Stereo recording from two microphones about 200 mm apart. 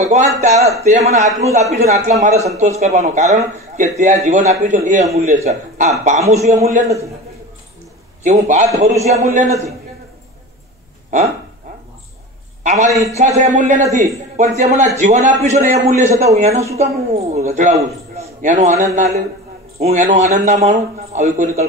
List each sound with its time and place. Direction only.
0.0 s a man's voice: 35° right (ahead or behind)
8.2 s a man's voice: 35° right (ahead or behind)
12.6 s a man's voice: 35° right (ahead or behind)